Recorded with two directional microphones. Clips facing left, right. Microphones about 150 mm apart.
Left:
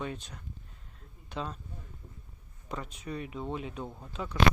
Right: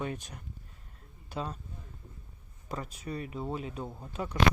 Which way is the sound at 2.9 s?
40° right (ahead or behind).